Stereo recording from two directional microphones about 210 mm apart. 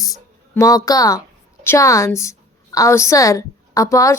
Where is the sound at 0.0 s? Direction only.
15° left (ahead or behind).